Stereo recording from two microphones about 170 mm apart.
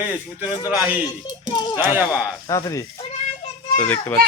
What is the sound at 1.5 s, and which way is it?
Speech, 25° left (ahead or behind).